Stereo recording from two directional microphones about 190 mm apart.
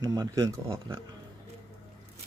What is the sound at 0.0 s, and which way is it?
Speech, 20° right (ahead or behind).